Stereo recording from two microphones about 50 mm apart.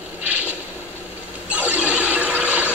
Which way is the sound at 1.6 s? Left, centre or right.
Right.